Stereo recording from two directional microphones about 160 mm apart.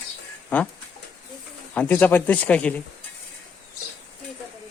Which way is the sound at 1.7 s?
10° left (ahead or behind).